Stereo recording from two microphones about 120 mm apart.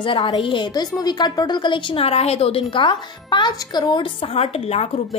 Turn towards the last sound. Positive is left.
turn(degrees=55)  # may be behind; listen again after turning